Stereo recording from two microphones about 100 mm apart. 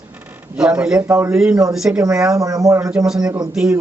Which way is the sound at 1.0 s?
25° right (ahead or behind).